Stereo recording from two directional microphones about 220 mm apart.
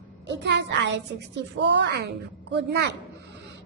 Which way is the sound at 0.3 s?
50° right (ahead or behind).